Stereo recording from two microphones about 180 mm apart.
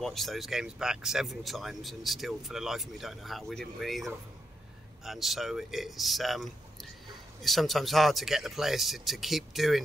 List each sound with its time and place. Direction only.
0.0 s speech: centre (ahead or behind)